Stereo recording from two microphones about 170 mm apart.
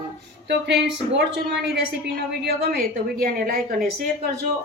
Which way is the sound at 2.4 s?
60° right (ahead or behind).